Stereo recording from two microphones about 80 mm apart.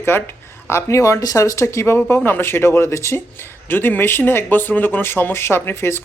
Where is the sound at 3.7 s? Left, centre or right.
Left.